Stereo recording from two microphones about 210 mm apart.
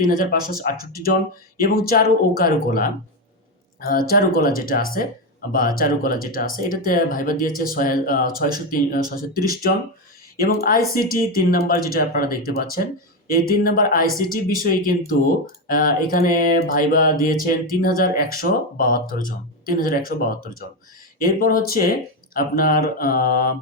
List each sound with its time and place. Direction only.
0.0 s speech: 40° left (ahead or behind)